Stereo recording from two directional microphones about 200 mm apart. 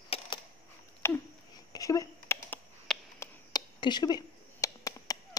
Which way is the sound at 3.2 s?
20° left (ahead or behind).